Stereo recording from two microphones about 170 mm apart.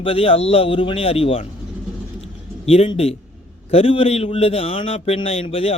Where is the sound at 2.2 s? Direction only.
35° left (ahead or behind).